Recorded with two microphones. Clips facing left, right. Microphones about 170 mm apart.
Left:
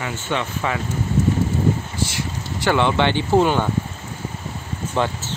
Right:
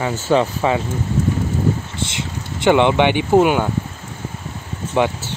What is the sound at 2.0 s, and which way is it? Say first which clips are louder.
Speech: even; 20° right (ahead or behind).